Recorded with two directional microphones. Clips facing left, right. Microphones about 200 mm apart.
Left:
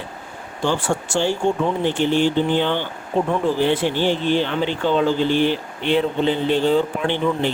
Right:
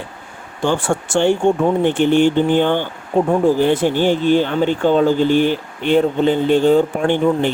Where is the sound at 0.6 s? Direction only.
55° right (ahead or behind).